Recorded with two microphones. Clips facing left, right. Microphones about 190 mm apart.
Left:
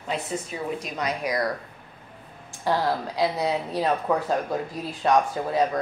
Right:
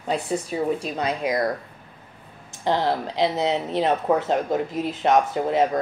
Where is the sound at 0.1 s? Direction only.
35° right (ahead or behind).